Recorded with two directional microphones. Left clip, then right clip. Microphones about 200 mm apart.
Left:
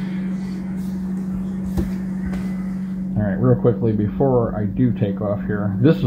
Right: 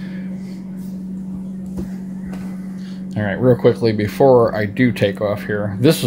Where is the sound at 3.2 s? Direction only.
55° right (ahead or behind).